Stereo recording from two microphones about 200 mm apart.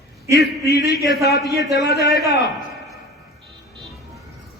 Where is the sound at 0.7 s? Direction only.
55° left (ahead or behind).